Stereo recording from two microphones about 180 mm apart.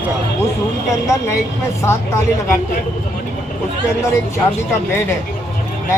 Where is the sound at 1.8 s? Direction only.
15° left (ahead or behind).